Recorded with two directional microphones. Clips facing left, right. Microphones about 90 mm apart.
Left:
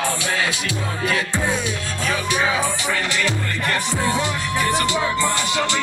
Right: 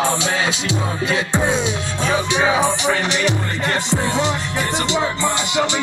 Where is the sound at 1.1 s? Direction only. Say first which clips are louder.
Right 5 dB; 20° right (ahead or behind).